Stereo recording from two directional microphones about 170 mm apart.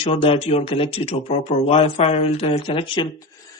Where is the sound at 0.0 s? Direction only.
35° left (ahead or behind).